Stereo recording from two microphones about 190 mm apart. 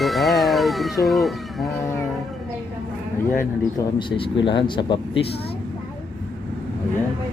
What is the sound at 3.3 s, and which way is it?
Speech, 20° left (ahead or behind).